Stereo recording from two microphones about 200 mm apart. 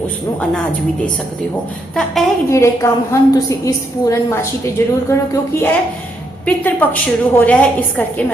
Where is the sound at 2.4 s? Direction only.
15° left (ahead or behind).